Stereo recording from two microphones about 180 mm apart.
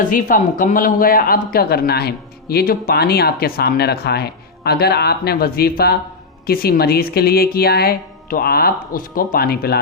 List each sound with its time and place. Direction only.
0.0 s speech: 50° left (ahead or behind)